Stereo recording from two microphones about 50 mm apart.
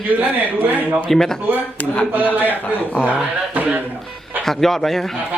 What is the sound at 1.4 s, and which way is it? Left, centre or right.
Speech, right.